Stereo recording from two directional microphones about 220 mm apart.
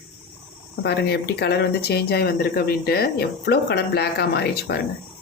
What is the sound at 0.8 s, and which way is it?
Speech, 45° left (ahead or behind).